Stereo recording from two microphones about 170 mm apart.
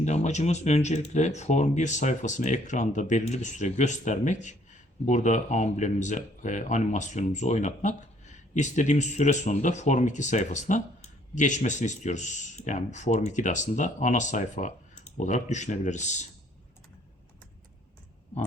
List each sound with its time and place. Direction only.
0.0 s speech: 40° left (ahead or behind)